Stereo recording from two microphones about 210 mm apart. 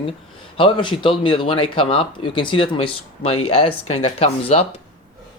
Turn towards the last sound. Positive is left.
turn(degrees=30)  # may be behind; listen again after turning